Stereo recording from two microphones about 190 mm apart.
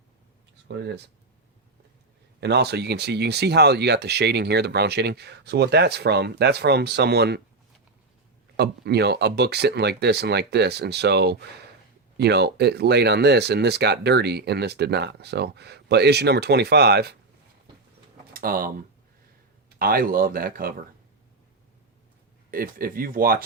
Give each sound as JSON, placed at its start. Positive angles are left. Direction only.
{"t": 0.7, "sound": "speech", "side_deg": -60}
{"t": 2.4, "sound": "speech", "side_deg": -60}
{"t": 8.5, "sound": "speech", "side_deg": -60}
{"t": 18.3, "sound": "speech", "side_deg": -50}
{"t": 19.8, "sound": "speech", "side_deg": -50}
{"t": 22.5, "sound": "speech", "side_deg": -50}